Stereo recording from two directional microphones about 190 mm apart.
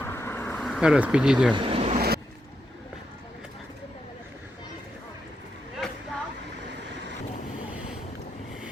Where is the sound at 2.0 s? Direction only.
55° right (ahead or behind).